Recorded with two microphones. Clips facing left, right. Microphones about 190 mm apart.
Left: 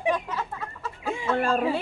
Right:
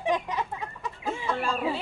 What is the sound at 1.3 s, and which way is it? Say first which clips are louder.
Speech: left 9 dB; 55° left (ahead or behind).